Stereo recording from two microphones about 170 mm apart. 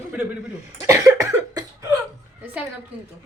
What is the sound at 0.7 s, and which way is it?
Cough, 20° right (ahead or behind).